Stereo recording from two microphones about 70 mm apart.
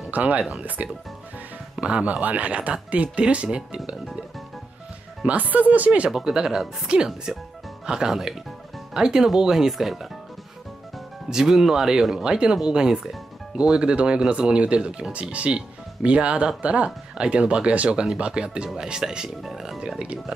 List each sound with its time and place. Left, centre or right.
0.1 s speech: right
5.2 s speech: right; by 10.0 s centre
11.2 s speech: centre